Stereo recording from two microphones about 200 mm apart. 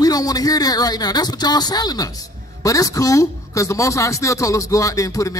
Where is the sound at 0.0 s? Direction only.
20° left (ahead or behind).